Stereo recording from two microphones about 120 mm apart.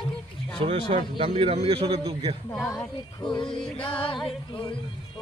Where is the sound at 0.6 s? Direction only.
50° right (ahead or behind).